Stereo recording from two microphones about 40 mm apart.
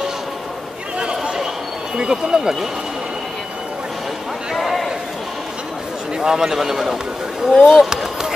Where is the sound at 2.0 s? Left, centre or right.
Centre.